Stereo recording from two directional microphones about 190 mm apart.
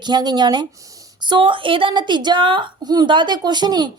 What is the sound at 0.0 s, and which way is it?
A woman's voice, 20° right (ahead or behind).